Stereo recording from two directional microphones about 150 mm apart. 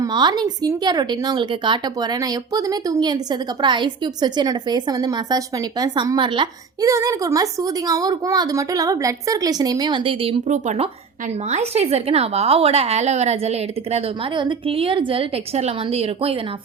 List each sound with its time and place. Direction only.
0.0 s a woman's voice: 30° right (ahead or behind)
6.9 s a woman's voice: 20° right (ahead or behind)
10.5 s a woman's voice: 50° right (ahead or behind)